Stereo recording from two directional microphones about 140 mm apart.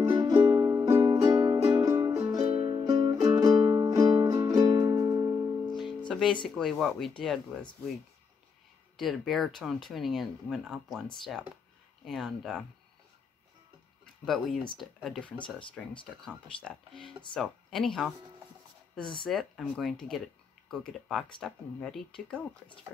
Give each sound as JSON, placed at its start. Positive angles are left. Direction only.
{"t": 0.1, "sound": "music", "side_deg": -25}
{"t": 6.0, "sound": "music", "side_deg": 5}
{"t": 6.4, "sound": "speech", "side_deg": 5}
{"t": 8.9, "sound": "speech", "side_deg": 0}
{"t": 14.2, "sound": "speech", "side_deg": 0}
{"t": 19.2, "sound": "speech", "side_deg": 0}